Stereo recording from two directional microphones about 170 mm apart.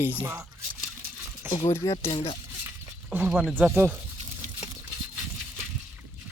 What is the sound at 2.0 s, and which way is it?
Speech, 35° left (ahead or behind).